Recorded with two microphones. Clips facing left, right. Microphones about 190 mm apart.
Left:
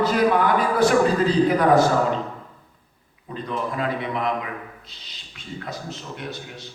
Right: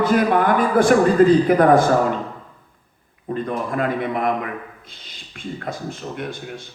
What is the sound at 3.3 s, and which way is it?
A man's voice, 50° right (ahead or behind).